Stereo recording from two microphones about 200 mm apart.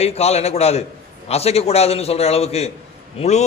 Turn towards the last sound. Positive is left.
turn(degrees=35)  # may be behind; listen again after turning